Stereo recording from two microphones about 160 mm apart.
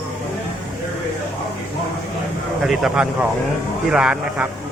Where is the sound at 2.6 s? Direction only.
Centre (ahead or behind).